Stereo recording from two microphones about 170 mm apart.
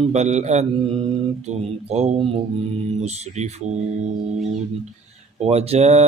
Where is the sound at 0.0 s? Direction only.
40° right (ahead or behind).